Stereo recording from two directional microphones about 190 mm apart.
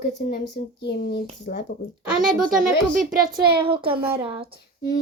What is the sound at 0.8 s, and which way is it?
Speech, 60° left (ahead or behind).